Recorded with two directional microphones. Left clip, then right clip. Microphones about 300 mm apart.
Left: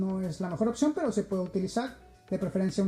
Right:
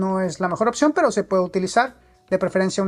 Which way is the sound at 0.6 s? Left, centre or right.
Centre.